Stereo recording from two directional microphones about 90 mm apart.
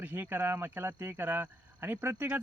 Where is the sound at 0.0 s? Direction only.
20° right (ahead or behind).